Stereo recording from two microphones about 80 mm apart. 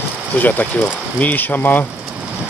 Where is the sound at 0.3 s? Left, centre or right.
Left.